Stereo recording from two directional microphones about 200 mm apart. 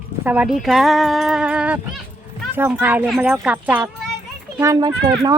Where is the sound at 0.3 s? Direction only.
5° right (ahead or behind).